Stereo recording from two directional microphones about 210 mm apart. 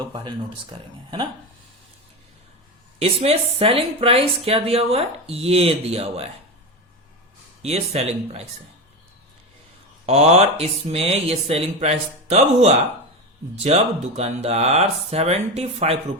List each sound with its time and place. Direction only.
0.0 s speech: 25° right (ahead or behind)
3.0 s speech: 30° right (ahead or behind)
7.6 s speech: 30° right (ahead or behind)
10.1 s speech: 30° right (ahead or behind)